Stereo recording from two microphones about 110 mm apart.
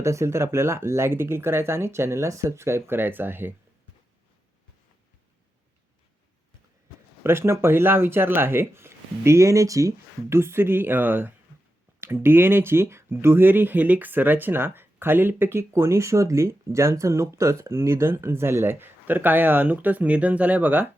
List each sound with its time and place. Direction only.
0.0 s speech: 25° right (ahead or behind)
7.3 s speech: 20° right (ahead or behind)